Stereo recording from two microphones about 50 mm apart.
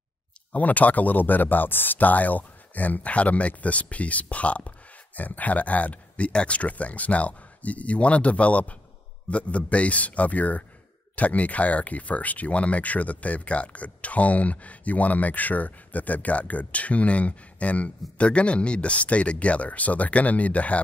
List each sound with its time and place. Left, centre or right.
0.5 s speech: left